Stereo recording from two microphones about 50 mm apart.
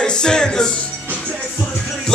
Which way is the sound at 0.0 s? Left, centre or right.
Centre.